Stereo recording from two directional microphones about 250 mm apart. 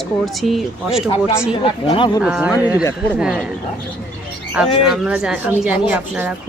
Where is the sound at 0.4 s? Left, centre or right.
Centre.